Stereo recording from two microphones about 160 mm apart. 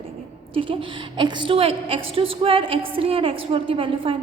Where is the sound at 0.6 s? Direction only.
35° right (ahead or behind).